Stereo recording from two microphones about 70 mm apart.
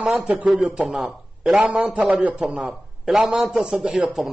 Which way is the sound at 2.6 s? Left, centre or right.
Centre.